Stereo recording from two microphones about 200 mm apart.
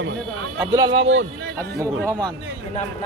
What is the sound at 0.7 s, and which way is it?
Speech, 20° right (ahead or behind).